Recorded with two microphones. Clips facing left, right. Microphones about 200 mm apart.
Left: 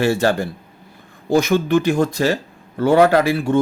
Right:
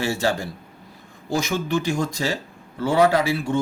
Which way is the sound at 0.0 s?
60° left (ahead or behind).